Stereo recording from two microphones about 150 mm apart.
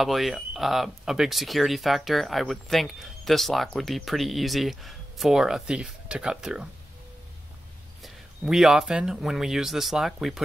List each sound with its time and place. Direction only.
0.0 s speech: centre (ahead or behind)
8.0 s speech: 5° right (ahead or behind)